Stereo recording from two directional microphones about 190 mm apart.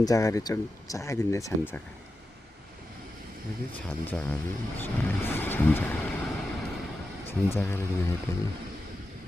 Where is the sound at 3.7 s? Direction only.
10° left (ahead or behind).